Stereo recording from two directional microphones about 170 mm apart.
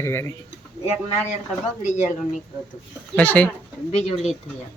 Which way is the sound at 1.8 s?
45° left (ahead or behind).